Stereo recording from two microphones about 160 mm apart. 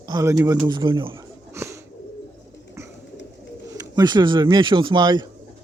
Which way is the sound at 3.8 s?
25° right (ahead or behind).